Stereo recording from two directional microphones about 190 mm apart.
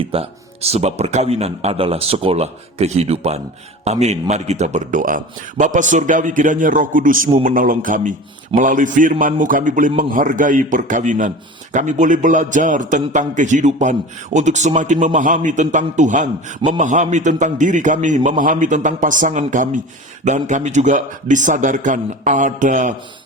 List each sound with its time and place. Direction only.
0.0 s a man's voice: 30° right (ahead or behind)